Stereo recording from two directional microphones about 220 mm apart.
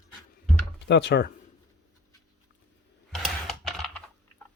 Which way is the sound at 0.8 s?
50° left (ahead or behind).